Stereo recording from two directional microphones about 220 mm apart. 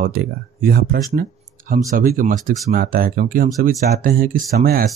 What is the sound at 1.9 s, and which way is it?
Speech, 40° right (ahead or behind).